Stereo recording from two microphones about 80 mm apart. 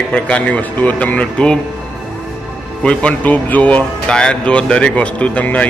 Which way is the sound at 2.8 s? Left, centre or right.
Centre.